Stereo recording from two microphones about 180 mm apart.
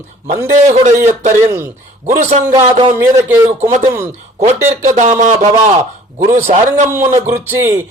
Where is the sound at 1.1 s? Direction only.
40° right (ahead or behind).